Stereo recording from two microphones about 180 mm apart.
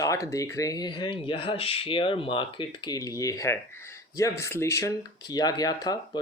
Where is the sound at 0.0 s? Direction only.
20° left (ahead or behind).